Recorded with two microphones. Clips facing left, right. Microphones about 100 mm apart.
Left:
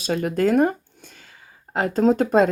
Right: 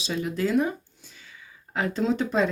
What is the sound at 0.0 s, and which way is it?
Speech, 50° left (ahead or behind).